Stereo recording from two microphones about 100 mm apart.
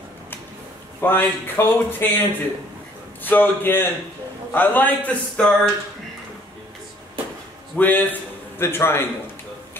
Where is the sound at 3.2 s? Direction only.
20° left (ahead or behind).